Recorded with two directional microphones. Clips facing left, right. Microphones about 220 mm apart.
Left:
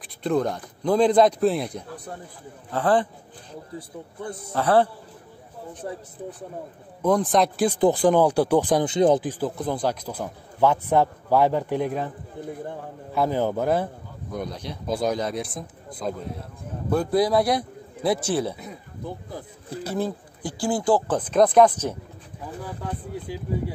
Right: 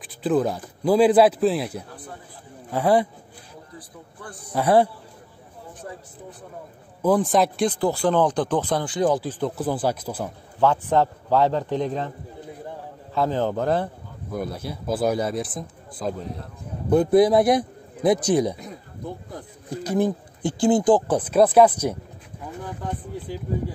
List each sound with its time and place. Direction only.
0.0 s a man's voice: 5° right (ahead or behind)
3.7 s a man's voice: 25° left (ahead or behind)
4.5 s speech: 15° right (ahead or behind)
5.8 s speech: 30° left (ahead or behind)
7.0 s a man's voice: 5° right (ahead or behind)
7.7 s speech: 15° left (ahead or behind)
9.4 s speech: 5° right (ahead or behind)
10.6 s speech: 10° left (ahead or behind)
13.1 s speech: 10° left (ahead or behind)
14.3 s a man's voice: 5° right (ahead or behind)
16.9 s a man's voice: 20° right (ahead or behind)
19.8 s speech: 15° right (ahead or behind)